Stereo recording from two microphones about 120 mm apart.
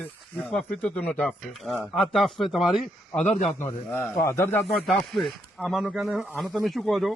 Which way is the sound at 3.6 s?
15° left (ahead or behind).